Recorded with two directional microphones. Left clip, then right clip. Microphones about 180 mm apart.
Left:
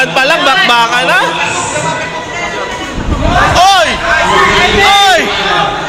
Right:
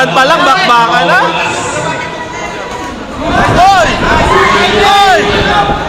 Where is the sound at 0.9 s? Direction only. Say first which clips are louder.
Right 1 dB; 40° left (ahead or behind).